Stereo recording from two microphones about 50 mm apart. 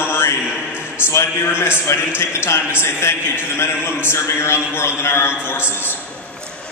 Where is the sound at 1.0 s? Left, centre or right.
Left.